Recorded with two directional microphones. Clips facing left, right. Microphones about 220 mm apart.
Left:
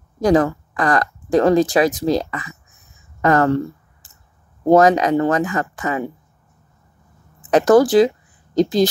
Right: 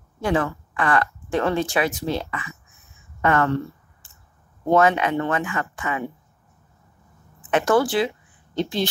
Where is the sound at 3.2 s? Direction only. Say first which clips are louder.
Left 5 dB; 40° left (ahead or behind).